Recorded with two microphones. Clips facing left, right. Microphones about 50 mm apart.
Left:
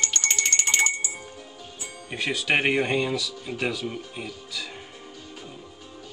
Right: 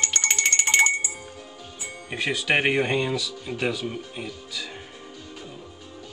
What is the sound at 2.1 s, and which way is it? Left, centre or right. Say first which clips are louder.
Speech: right 1 dB; centre.